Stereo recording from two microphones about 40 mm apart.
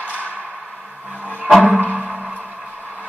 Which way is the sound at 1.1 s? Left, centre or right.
Right.